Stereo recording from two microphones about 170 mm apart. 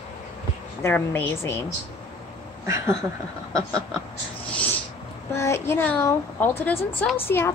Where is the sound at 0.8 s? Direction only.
10° left (ahead or behind).